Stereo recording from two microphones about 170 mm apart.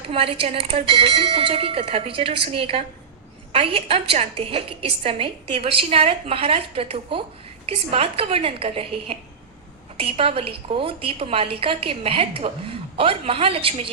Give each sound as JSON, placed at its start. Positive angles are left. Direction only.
{"t": 0.1, "sound": "a woman's voice", "side_deg": -35}